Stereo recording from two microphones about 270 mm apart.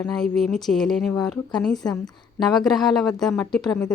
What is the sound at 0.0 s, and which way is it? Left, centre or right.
Speech, centre.